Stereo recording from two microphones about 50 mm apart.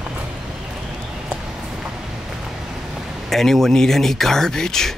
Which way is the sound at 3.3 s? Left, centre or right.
Centre.